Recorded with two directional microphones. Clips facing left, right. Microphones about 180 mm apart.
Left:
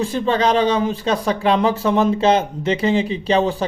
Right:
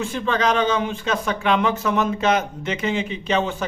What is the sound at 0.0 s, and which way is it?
Speech, 35° left (ahead or behind).